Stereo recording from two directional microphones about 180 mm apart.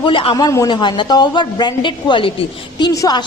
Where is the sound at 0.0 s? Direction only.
30° left (ahead or behind).